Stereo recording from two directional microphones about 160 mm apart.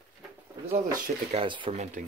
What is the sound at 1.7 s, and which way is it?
Speech, 45° right (ahead or behind).